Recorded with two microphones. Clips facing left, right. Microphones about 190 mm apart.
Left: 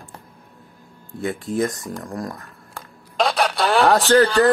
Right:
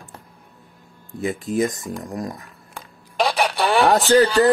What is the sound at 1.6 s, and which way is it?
Speech, centre (ahead or behind).